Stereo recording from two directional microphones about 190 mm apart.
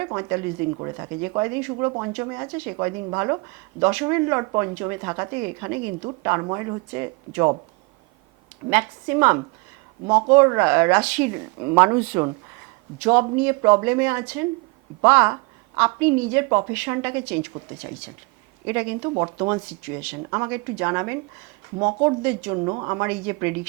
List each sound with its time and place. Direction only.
0.0 s speech: 15° right (ahead or behind)
8.7 s speech: 10° right (ahead or behind)
16.5 s speech: 20° right (ahead or behind)
16.7 s speech: 10° right (ahead or behind)
18.6 s speech: 10° right (ahead or behind)
21.8 s speech: 25° right (ahead or behind)
22.2 s speech: 10° right (ahead or behind)
22.5 s speech: 25° right (ahead or behind)